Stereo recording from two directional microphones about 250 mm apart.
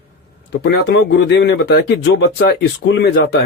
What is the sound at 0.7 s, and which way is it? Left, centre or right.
Speech, left.